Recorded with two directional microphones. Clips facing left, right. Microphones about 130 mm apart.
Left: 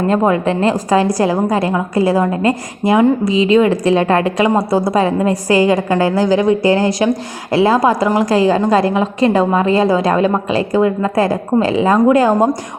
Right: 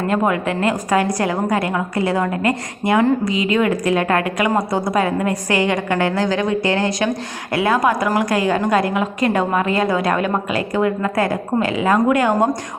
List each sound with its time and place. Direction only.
0.1 s a woman's voice: 30° left (ahead or behind)